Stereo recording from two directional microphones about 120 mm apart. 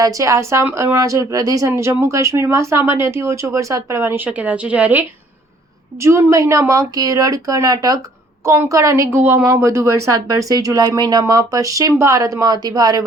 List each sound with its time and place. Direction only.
0.0 s a woman's voice: 30° right (ahead or behind)
6.0 s a woman's voice: 25° right (ahead or behind)
8.4 s a woman's voice: 20° right (ahead or behind)